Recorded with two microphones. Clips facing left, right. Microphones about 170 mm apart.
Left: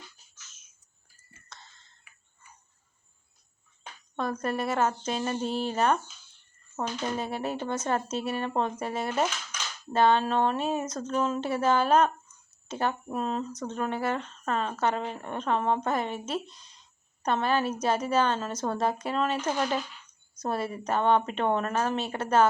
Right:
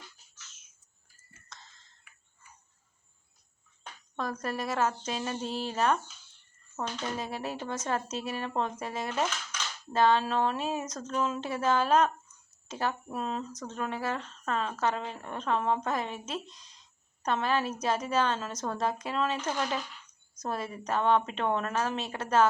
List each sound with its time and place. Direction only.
4.2 s speech: centre (ahead or behind)
7.2 s speech: centre (ahead or behind)
19.5 s speech: 25° left (ahead or behind)
20.5 s speech: centre (ahead or behind)